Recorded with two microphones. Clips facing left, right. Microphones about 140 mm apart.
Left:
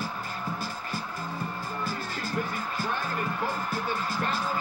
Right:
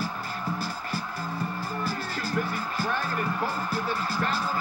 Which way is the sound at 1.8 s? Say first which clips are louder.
Right 1 dB; 35° right (ahead or behind).